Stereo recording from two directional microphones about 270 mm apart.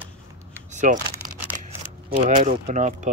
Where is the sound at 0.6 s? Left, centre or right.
Right.